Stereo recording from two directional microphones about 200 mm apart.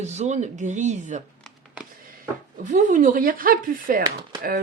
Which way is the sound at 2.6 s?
40° right (ahead or behind).